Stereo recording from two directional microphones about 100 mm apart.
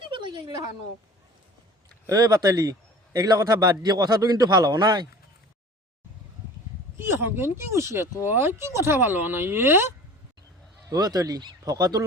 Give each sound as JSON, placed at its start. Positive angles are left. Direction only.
{"t": 0.1, "sound": "a sound", "side_deg": -50}
{"t": 2.0, "sound": "a man's voice", "side_deg": -40}
{"t": 7.0, "sound": "speech", "side_deg": -25}
{"t": 10.8, "sound": "a man's voice", "side_deg": -40}